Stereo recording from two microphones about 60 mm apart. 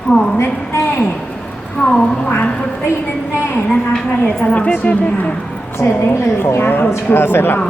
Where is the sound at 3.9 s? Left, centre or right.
Left.